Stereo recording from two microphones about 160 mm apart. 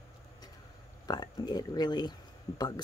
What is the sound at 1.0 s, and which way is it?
Speech, 25° left (ahead or behind).